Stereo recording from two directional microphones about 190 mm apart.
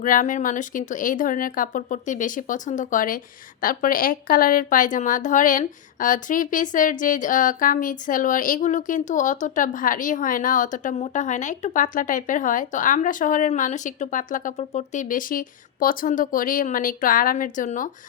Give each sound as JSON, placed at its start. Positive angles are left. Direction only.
{"t": 0.0, "sound": "a woman's voice", "side_deg": 45}